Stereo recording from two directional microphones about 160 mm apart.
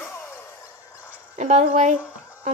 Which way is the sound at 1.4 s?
45° right (ahead or behind).